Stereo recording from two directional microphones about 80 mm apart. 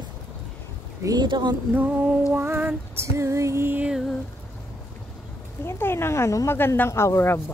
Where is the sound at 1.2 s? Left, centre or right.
Right.